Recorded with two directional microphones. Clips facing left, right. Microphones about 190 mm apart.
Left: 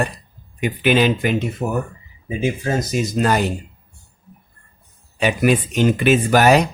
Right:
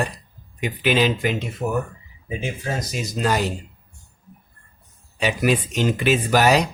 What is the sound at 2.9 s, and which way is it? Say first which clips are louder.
Speech: left 3 dB; 55° left (ahead or behind).